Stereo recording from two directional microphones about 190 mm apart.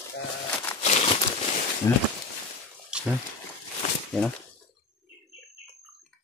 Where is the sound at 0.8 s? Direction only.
35° left (ahead or behind).